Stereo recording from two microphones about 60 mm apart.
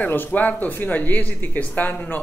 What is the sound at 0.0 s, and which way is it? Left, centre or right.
Speech, left.